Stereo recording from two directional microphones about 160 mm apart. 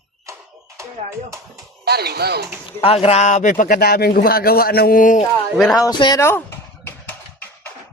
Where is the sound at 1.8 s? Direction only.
85° right.